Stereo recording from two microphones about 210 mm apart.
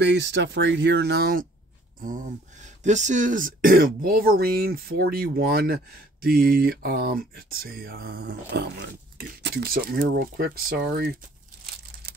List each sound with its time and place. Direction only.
0.0 s speech: 55° right (ahead or behind)